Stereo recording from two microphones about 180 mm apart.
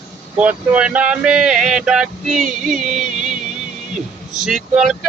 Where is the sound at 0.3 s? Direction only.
5° right (ahead or behind).